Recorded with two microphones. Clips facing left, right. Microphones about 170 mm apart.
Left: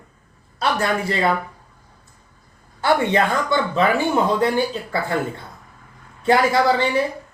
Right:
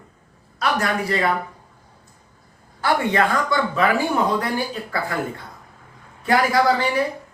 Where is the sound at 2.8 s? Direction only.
25° left (ahead or behind).